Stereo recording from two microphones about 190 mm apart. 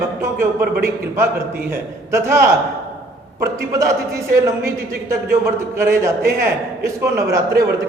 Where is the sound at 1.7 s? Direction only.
15° right (ahead or behind).